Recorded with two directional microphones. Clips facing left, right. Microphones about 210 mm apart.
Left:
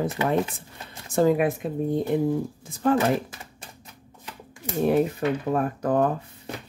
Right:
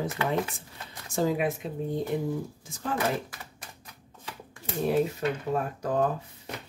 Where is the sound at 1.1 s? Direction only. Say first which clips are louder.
Left 6 dB; 55° left (ahead or behind).